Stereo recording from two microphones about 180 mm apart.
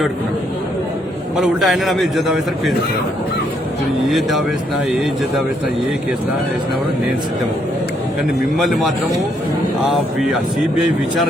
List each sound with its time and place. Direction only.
1.4 s a man's voice: centre (ahead or behind)
4.1 s a man's voice: centre (ahead or behind)
8.5 s a man's voice: centre (ahead or behind)
9.9 s a man's voice: centre (ahead or behind)